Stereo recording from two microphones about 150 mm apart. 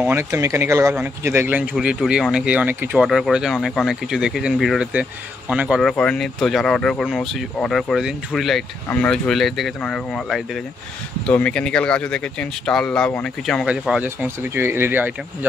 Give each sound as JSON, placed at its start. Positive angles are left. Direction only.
{"t": 0.1, "sound": "speech", "side_deg": -20}
{"t": 13.7, "sound": "speech", "side_deg": -5}